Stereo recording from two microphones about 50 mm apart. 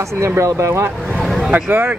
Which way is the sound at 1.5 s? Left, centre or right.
Right.